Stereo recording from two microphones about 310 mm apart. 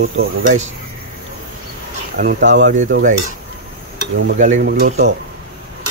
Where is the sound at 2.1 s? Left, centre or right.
Right.